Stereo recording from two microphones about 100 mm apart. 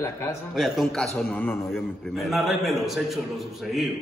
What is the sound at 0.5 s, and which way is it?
Speech, centre (ahead or behind).